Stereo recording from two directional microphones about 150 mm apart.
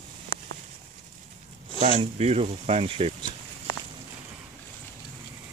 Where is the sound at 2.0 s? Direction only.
45° right (ahead or behind).